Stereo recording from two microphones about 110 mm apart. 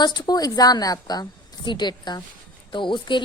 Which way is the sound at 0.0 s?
40° left (ahead or behind).